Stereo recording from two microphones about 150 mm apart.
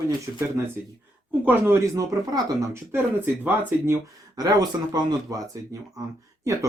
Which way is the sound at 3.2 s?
10° right (ahead or behind).